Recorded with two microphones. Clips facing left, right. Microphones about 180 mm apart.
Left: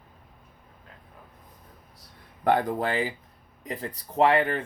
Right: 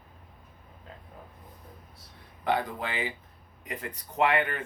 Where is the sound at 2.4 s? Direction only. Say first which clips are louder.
Left 6 dB; 50° left (ahead or behind).